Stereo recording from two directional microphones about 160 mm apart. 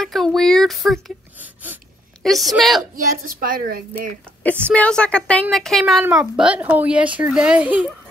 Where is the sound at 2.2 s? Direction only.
Centre (ahead or behind).